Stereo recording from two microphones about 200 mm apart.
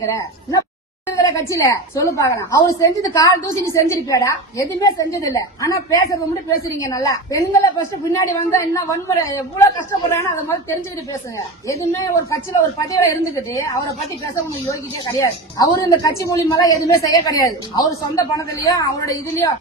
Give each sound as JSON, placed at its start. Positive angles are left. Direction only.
{"t": 1.1, "sound": "a woman's voice", "side_deg": 15}
{"t": 11.3, "sound": "a woman's voice", "side_deg": 15}